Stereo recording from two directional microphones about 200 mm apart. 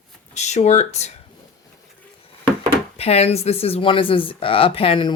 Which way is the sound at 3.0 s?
30° left (ahead or behind).